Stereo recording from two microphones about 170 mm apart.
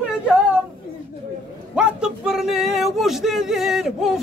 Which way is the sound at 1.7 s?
5° right (ahead or behind).